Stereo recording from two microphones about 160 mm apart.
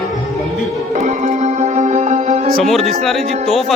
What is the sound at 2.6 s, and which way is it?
Speech, centre (ahead or behind).